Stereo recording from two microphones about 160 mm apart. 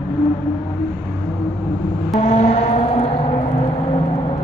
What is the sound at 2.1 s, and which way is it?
Vehicle, 45° left (ahead or behind).